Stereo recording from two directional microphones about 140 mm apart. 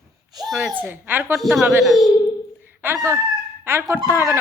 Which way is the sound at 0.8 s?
15° right (ahead or behind).